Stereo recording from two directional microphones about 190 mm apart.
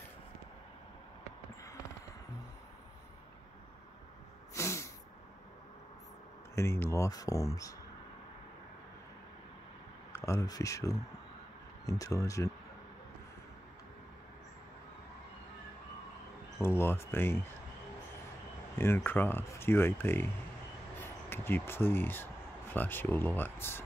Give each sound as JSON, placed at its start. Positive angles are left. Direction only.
{"t": 4.6, "sound": "snort", "side_deg": 15}
{"t": 6.5, "sound": "speech", "side_deg": 15}
{"t": 10.1, "sound": "speech", "side_deg": 15}
{"t": 16.6, "sound": "speech", "side_deg": 10}
{"t": 18.8, "sound": "speech", "side_deg": 10}